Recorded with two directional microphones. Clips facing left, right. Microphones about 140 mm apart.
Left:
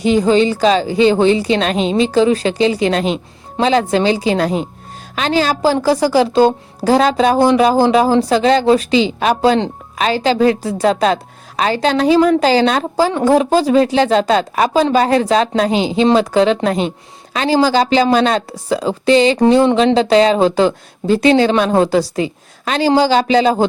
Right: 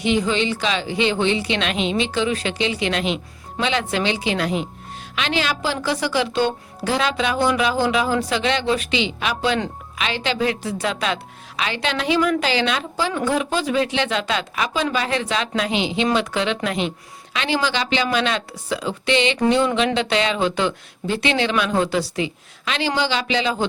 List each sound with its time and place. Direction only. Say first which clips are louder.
0.0 s a woman's voice: left 8 dB; 40° left (ahead or behind)